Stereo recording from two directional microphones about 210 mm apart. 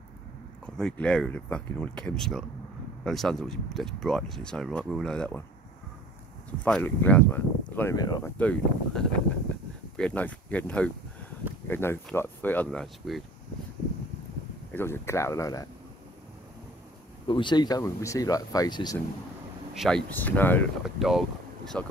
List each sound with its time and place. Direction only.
0.7 s speech: 5° left (ahead or behind)
6.6 s speech: 10° left (ahead or behind)
14.7 s speech: 10° left (ahead or behind)
17.3 s speech: 20° left (ahead or behind)
19.8 s speech: 5° left (ahead or behind)